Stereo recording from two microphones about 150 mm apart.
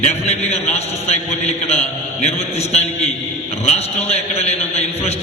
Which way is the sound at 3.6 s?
45° left (ahead or behind).